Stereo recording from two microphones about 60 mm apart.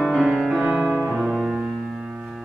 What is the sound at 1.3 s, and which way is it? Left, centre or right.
Music, centre.